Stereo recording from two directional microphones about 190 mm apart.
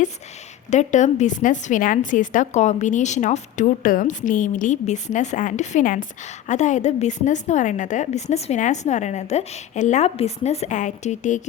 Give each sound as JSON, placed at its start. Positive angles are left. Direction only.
{"t": 0.7, "sound": "a woman's voice", "side_deg": 40}